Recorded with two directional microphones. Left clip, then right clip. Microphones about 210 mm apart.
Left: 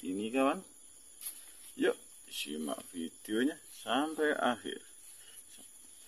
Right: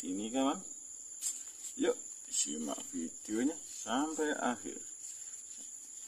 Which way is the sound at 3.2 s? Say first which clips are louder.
Left 3 dB; 50° left (ahead or behind).